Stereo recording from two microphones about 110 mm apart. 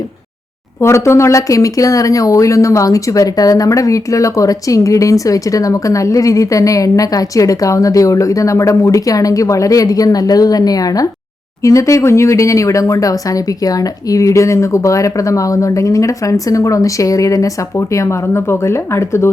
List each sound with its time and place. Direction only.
0.8 s speech: 25° left (ahead or behind)